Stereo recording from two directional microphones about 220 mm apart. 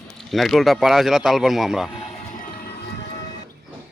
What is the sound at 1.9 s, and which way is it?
Music, 30° left (ahead or behind).